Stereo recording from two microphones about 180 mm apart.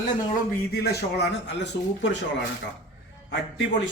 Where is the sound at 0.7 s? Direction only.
65° left (ahead or behind).